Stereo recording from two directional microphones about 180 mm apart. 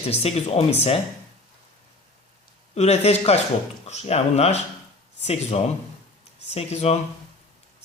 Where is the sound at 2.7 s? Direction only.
35° left (ahead or behind).